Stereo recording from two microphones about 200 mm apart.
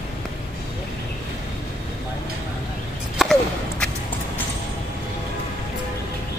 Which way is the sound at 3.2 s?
Centre (ahead or behind).